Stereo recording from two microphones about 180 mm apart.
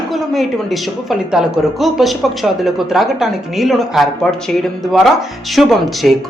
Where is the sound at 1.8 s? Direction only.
Centre (ahead or behind).